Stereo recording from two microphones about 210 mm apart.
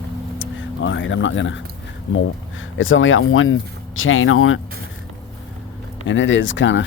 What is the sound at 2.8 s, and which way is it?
Speech, 70° left (ahead or behind).